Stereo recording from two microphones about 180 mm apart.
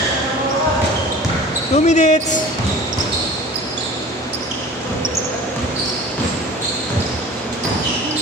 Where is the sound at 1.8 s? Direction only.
40° left (ahead or behind).